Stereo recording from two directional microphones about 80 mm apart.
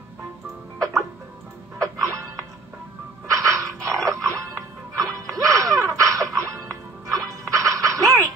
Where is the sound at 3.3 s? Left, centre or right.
Right.